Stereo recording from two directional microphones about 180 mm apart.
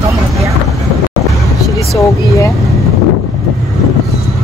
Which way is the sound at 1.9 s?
15° left (ahead or behind).